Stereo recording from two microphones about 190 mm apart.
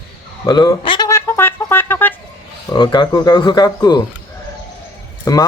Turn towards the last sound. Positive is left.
turn(degrees=20)  # may be behind; listen again after turning